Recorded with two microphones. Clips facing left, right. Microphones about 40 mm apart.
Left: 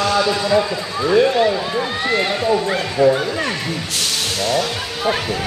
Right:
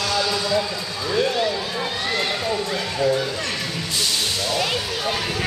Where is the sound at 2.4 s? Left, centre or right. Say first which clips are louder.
Left 6 dB; left.